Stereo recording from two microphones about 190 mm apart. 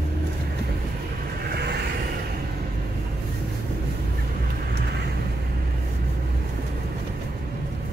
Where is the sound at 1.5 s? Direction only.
55° right (ahead or behind).